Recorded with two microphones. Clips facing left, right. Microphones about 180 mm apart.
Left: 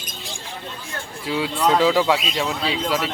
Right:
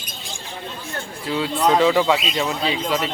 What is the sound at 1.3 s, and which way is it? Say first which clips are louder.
Speech: right 1 dB; 5° left (ahead or behind).